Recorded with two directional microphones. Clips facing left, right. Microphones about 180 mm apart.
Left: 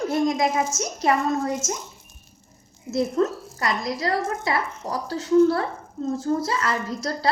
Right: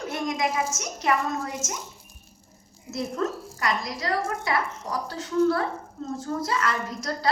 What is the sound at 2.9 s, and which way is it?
A woman's voice, 30° left (ahead or behind).